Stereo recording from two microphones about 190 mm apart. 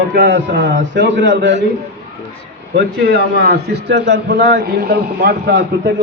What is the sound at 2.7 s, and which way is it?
A man's voice, 60° right (ahead or behind).